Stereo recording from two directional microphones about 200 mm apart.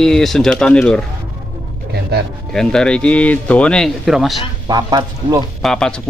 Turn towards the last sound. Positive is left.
turn(degrees=5)  # may be behind; listen again after turning